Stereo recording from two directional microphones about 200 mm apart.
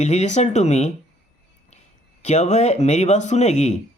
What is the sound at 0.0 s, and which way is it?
Speech, 35° left (ahead or behind).